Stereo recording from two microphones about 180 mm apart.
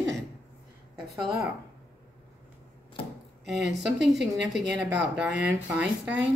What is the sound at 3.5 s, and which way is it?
Speech, 70° right (ahead or behind).